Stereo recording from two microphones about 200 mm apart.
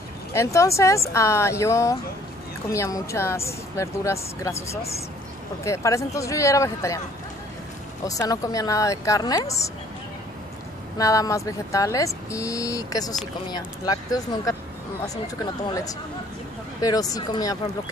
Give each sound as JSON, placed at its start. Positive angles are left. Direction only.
{"t": 0.3, "sound": "speech", "side_deg": 15}
{"t": 5.6, "sound": "speech", "side_deg": 15}
{"t": 8.0, "sound": "speech", "side_deg": 15}
{"t": 11.0, "sound": "speech", "side_deg": 15}
{"t": 15.7, "sound": "speech", "side_deg": 15}